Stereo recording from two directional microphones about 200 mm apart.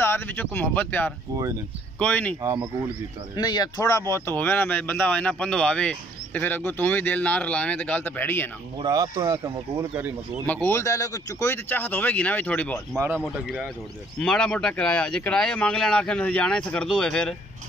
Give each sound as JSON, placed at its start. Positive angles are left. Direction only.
{"t": 0.0, "sound": "speech", "side_deg": 10}
{"t": 2.4, "sound": "speech", "side_deg": -15}
{"t": 3.3, "sound": "speech", "side_deg": 20}
{"t": 8.8, "sound": "speech", "side_deg": -20}
{"t": 10.4, "sound": "speech", "side_deg": 10}
{"t": 12.9, "sound": "speech", "side_deg": -10}
{"t": 14.2, "sound": "speech", "side_deg": 5}